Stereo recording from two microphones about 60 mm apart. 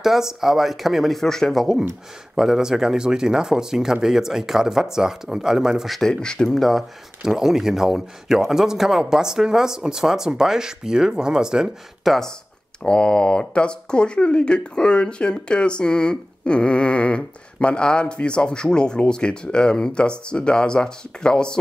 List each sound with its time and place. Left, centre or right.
0.0 s speech: centre
2.3 s speech: centre
6.0 s speech: centre
7.2 s speech: centre
12.8 s speech: centre